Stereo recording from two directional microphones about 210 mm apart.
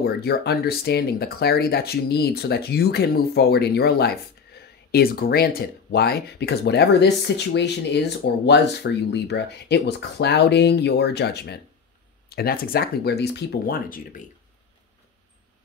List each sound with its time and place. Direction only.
0.0 s speech: 50° left (ahead or behind)